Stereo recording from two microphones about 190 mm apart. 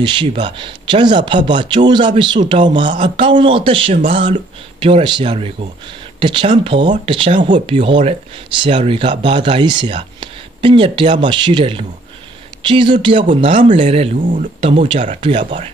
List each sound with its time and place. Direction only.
0.0 s a man's voice: 25° right (ahead or behind)
7.3 s speech: 40° right (ahead or behind)
7.6 s a man's voice: 25° right (ahead or behind); by 14.5 s 45° right (ahead or behind)
14.6 s speech: 30° right (ahead or behind)